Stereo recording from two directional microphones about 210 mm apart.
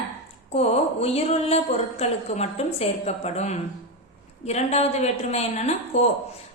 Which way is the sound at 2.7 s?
30° left (ahead or behind).